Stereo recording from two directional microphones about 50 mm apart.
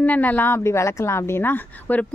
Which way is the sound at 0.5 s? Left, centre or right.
Left.